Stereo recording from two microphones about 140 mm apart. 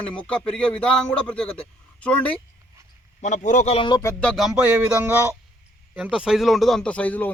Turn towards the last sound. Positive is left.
turn(degrees=10)  # may be behind; listen again after turning